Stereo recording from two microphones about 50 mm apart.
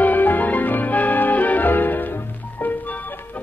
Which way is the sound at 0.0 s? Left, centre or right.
Left.